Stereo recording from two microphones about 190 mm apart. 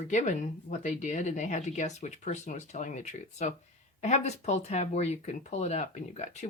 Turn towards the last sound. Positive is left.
turn(degrees=35)  # may be behind; listen again after turning